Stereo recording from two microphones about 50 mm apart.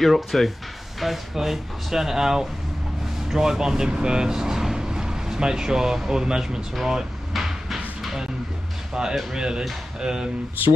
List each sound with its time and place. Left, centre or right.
0.0 s speech: centre
6.7 s a sound: centre
9.3 s speech: centre